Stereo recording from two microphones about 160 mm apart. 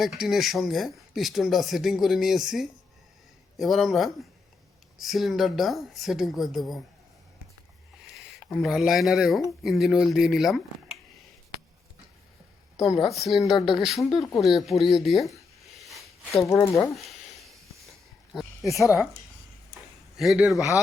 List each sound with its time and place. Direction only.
0.0 s speech: centre (ahead or behind)
8.1 s speech: 5° left (ahead or behind)
13.1 s speech: centre (ahead or behind)
16.4 s speech: 20° left (ahead or behind)
16.9 s a sound: centre (ahead or behind)
18.8 s speech: 5° right (ahead or behind)
20.1 s speech: 5° right (ahead or behind)